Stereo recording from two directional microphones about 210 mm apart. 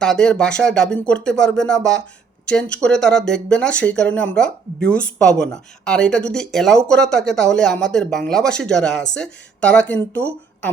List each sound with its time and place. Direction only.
0.0 s speech: 5° left (ahead or behind)